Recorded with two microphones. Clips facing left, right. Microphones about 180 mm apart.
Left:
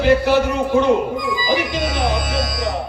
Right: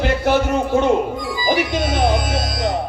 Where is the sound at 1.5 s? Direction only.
50° right (ahead or behind).